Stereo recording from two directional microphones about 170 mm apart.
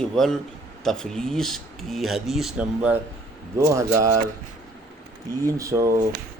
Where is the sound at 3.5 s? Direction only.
15° right (ahead or behind).